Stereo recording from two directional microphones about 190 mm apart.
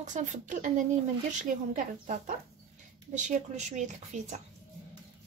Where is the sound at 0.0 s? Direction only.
40° right (ahead or behind).